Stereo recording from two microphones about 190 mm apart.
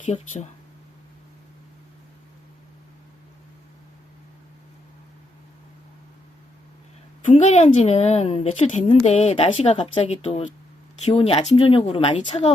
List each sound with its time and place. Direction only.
0.0 s a woman's voice: 40° left (ahead or behind)
7.3 s a woman's voice: 35° left (ahead or behind)